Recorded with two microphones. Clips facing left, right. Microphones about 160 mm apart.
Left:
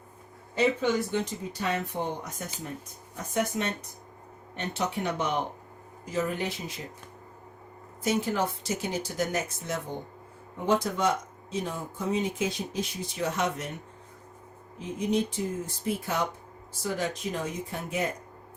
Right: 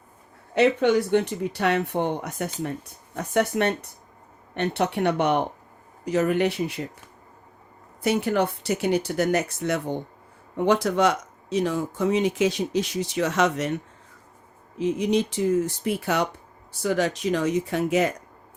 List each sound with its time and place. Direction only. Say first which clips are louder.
0.5 s speech: right 6 dB; 70° right (ahead or behind)
8.0 s speech: right 5 dB; 65° right (ahead or behind); by 13.7 s 85° right
14.8 s speech: right 6 dB; 85° right